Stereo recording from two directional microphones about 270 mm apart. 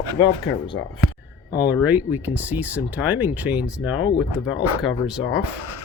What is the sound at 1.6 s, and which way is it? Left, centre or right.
Speech, centre.